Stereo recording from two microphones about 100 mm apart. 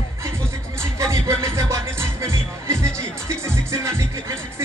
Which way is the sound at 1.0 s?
30° right (ahead or behind).